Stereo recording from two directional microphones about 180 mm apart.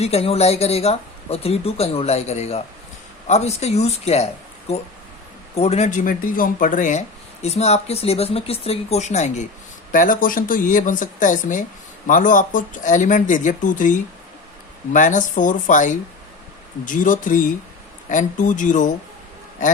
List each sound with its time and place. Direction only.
0.0 s speech: 35° left (ahead or behind)
5.5 s speech: 35° left (ahead or behind)